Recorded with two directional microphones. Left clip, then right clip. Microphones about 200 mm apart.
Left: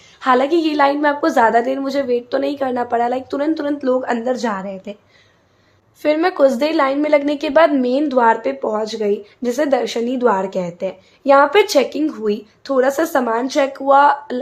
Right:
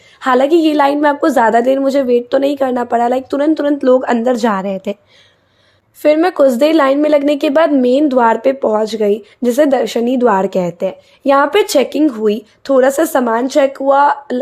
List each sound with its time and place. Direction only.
0.2 s a woman's voice: 30° right (ahead or behind)
6.0 s a woman's voice: 30° right (ahead or behind)